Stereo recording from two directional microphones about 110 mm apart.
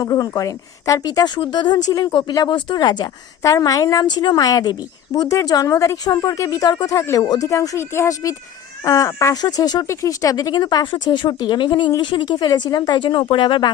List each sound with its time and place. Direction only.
0.0 s a woman's voice: 35° left (ahead or behind)
1.9 s a woman's voice: 30° left (ahead or behind)